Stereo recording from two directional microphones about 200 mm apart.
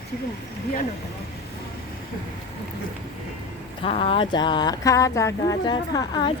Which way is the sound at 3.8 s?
30° left (ahead or behind).